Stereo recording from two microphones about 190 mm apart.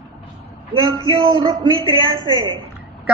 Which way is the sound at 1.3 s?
25° right (ahead or behind).